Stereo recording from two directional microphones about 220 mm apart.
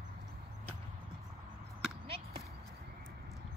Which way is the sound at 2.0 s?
25° right (ahead or behind).